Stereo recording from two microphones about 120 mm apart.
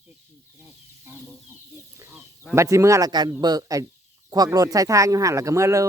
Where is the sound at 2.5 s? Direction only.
25° right (ahead or behind).